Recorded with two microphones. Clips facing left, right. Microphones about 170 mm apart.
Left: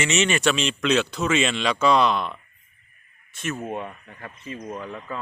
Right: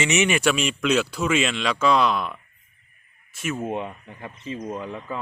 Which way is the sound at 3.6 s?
20° right (ahead or behind).